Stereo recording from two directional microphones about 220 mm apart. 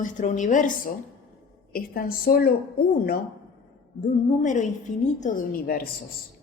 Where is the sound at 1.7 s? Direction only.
40° left (ahead or behind).